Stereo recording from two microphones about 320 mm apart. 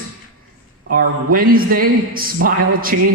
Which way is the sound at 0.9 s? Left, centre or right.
Right.